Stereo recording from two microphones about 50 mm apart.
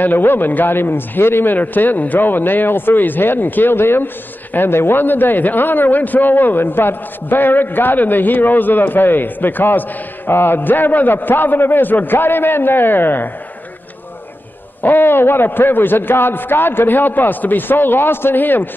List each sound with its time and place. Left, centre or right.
0.0 s a man's voice: left
14.8 s a man's voice: left